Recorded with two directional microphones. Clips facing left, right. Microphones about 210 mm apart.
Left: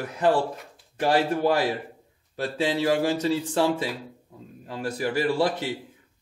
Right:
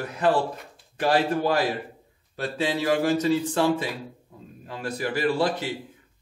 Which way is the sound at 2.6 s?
30° left (ahead or behind).